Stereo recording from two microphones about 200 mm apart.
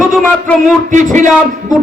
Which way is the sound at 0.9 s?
40° right (ahead or behind).